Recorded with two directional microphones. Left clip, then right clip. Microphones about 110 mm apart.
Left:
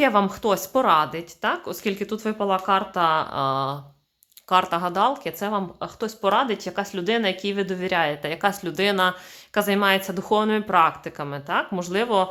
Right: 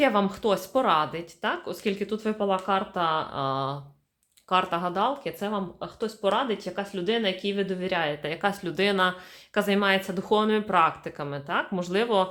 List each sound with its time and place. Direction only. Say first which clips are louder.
0.0 s speech: left 3 dB; 30° left (ahead or behind)